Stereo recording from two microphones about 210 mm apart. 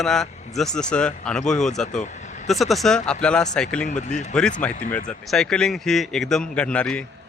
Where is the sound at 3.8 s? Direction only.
35° left (ahead or behind).